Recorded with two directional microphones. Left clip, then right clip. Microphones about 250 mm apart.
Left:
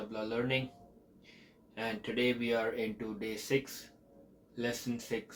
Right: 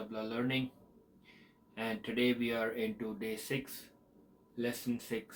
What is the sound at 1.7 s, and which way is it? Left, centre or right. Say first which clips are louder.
Speech: left 1 dB; centre.